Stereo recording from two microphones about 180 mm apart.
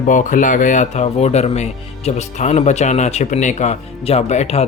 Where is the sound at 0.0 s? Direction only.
45° left (ahead or behind).